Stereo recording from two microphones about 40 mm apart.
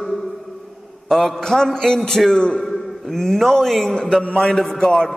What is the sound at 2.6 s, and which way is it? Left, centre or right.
A man's voice, centre.